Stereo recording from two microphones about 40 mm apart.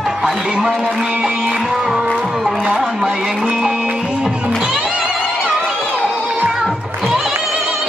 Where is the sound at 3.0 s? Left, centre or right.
Right.